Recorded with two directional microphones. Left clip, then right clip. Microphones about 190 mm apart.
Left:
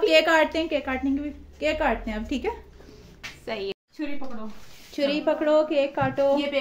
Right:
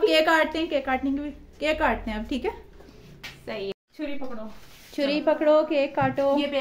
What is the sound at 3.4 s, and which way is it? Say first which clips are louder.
Speech: left 2 dB; 35° left (ahead or behind).